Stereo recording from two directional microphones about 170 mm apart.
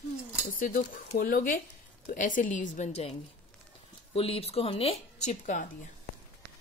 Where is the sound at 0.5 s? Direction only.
55° left (ahead or behind).